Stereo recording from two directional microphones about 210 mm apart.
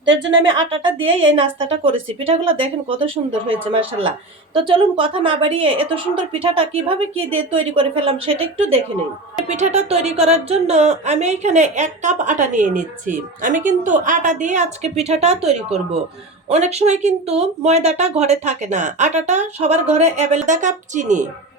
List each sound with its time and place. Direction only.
0.0 s a woman's voice: 20° right (ahead or behind)